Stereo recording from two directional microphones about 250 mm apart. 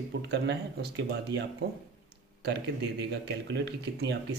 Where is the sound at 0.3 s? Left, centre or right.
Right.